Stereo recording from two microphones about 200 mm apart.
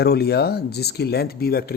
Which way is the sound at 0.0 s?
50° left (ahead or behind).